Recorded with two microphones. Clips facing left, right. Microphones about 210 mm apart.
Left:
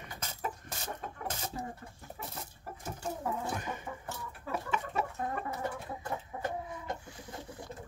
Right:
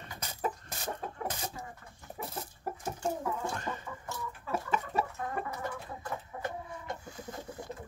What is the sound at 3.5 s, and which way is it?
Chicken, 15° left (ahead or behind).